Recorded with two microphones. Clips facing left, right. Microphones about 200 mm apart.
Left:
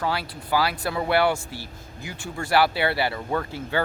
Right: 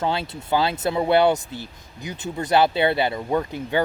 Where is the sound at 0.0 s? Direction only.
25° right (ahead or behind).